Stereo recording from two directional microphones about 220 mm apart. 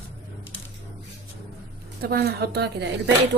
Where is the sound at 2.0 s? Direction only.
45° right (ahead or behind).